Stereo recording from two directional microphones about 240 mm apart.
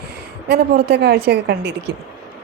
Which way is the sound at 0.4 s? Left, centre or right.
Right.